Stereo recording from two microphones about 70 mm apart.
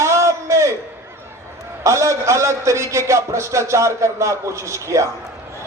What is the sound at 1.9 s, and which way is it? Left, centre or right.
A man's voice, right.